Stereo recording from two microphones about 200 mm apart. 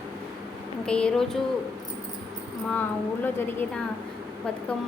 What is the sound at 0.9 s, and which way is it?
Speech, 5° left (ahead or behind).